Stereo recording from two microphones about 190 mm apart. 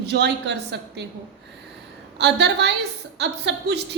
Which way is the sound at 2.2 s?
65° right (ahead or behind).